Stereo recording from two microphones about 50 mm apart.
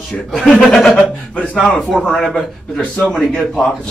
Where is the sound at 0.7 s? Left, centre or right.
Left.